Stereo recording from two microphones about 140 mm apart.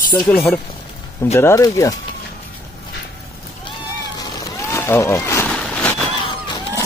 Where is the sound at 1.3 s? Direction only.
20° left (ahead or behind).